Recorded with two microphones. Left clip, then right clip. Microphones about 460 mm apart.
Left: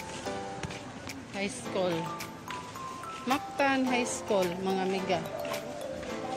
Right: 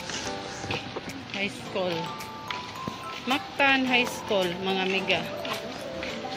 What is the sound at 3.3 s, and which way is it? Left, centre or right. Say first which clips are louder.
Speech: right 5 dB; left.